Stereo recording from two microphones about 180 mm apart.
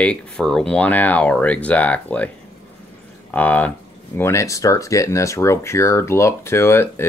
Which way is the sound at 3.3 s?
10° left (ahead or behind).